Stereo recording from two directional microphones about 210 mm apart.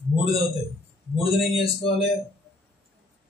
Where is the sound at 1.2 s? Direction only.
25° left (ahead or behind).